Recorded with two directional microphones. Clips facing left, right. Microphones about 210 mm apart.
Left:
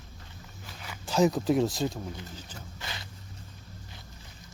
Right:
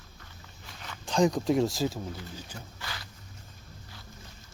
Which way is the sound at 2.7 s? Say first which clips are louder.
Left 3 dB; 20° left (ahead or behind).